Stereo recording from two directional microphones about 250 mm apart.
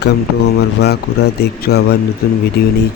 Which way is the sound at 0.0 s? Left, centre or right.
Left.